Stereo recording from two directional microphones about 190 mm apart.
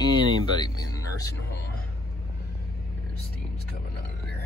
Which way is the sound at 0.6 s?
20° left (ahead or behind).